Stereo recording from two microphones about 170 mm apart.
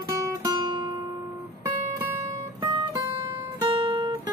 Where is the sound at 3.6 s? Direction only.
35° right (ahead or behind).